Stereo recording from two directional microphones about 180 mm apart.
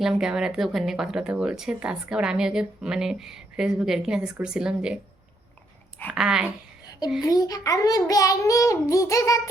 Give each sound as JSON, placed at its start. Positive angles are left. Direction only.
{"t": 0.0, "sound": "speech", "side_deg": -5}
{"t": 6.1, "sound": "speech", "side_deg": -5}
{"t": 7.2, "sound": "a child's voice", "side_deg": 20}